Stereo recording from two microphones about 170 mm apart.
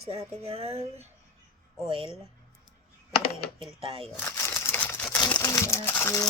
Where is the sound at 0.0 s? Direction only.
35° right (ahead or behind).